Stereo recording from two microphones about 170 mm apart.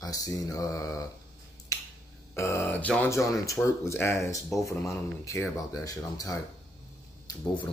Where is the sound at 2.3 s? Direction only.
15° left (ahead or behind).